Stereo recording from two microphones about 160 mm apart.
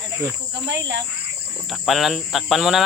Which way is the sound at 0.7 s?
90° right.